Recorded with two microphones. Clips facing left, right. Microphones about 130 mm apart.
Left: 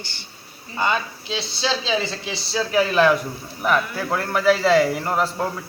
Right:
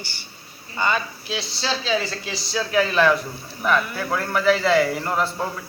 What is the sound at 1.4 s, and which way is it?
Speech, 20° left (ahead or behind).